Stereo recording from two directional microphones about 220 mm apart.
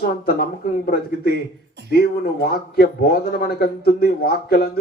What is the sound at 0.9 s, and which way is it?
A man's voice, 45° left (ahead or behind).